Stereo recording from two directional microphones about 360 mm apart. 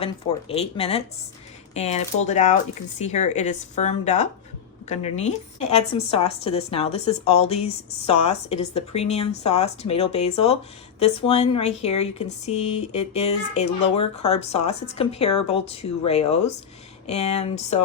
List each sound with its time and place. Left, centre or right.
0.0 s a woman's voice: centre